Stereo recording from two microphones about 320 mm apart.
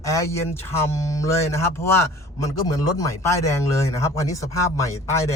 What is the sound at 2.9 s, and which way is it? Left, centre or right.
Speech, centre.